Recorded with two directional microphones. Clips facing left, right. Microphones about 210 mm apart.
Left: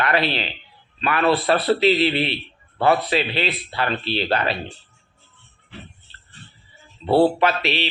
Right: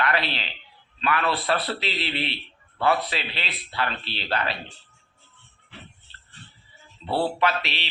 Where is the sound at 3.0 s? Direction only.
50° left (ahead or behind).